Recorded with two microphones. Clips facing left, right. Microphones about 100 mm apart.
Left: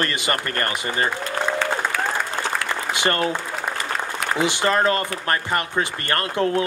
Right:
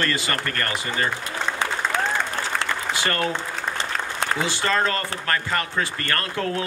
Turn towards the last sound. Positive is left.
turn(degrees=25)  # may be behind; listen again after turning